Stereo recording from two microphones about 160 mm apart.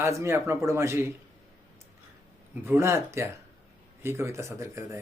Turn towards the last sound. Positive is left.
turn(degrees=-20)  # may be behind; listen again after turning